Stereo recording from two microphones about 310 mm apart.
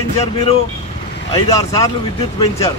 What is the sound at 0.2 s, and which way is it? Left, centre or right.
Speech, centre.